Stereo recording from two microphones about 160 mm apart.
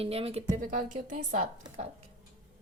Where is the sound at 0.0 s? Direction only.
35° right (ahead or behind).